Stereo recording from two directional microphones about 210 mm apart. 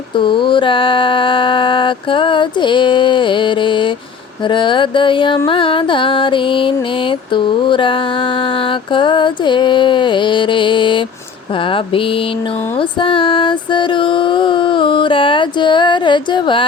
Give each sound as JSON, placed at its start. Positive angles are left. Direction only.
{"t": 0.2, "sound": "mantra", "side_deg": 25}
{"t": 4.4, "sound": "music", "side_deg": 25}
{"t": 13.0, "sound": "music", "side_deg": 25}